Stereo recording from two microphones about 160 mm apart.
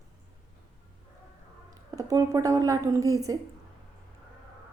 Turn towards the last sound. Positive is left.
turn(degrees=-20)  # may be behind; listen again after turning